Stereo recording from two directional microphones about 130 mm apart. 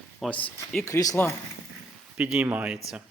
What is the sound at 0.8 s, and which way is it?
Speech, 25° left (ahead or behind).